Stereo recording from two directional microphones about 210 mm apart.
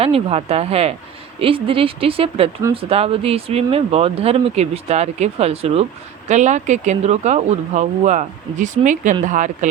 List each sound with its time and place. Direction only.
0.0 s speech: 30° right (ahead or behind)